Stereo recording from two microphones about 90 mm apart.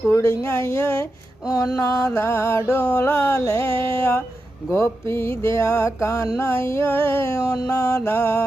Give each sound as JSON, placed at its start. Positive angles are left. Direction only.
{"t": 0.1, "sound": "music", "side_deg": 30}
{"t": 1.5, "sound": "mantra", "side_deg": 40}
{"t": 2.9, "sound": "music", "side_deg": 25}
{"t": 4.7, "sound": "mantra", "side_deg": 30}